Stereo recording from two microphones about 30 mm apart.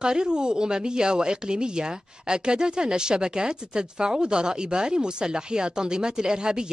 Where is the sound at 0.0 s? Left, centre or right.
Right.